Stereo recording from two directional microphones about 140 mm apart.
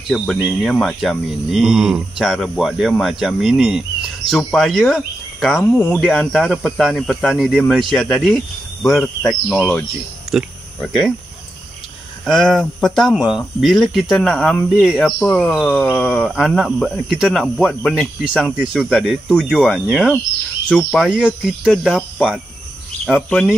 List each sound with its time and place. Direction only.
0.1 s speech: 5° right (ahead or behind)
8.8 s speech: 20° left (ahead or behind)
10.3 s speech: centre (ahead or behind)
12.4 s speech: 5° left (ahead or behind)